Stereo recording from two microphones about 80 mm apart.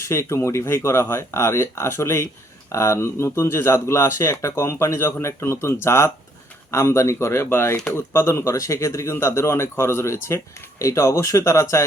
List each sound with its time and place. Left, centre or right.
0.0 s speech: left